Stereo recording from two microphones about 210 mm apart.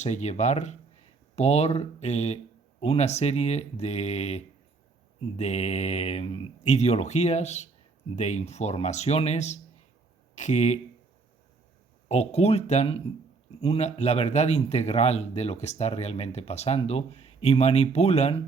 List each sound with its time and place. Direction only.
0.0 s speech: 30° left (ahead or behind)
12.0 s speech: 30° left (ahead or behind)